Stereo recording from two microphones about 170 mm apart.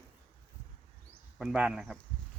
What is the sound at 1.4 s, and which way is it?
Speech, 5° right (ahead or behind).